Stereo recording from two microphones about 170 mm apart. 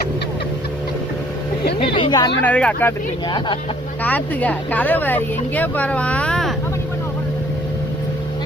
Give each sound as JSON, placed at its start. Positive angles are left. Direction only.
{"t": 1.8, "sound": "speech", "side_deg": 25}
{"t": 2.4, "sound": "speech", "side_deg": 10}
{"t": 3.2, "sound": "speech", "side_deg": 25}
{"t": 4.0, "sound": "speech", "side_deg": 10}